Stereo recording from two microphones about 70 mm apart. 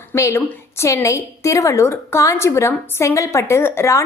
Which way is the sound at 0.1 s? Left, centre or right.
Left.